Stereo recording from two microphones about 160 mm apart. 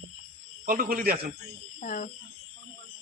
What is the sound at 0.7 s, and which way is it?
Speech, 65° right (ahead or behind).